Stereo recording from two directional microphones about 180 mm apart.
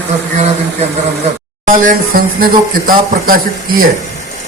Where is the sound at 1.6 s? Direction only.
50° right (ahead or behind).